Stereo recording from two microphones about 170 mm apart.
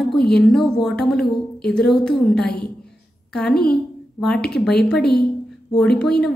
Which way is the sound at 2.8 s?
5° left (ahead or behind).